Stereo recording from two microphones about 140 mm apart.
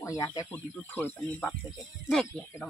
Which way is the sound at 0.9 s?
15° left (ahead or behind).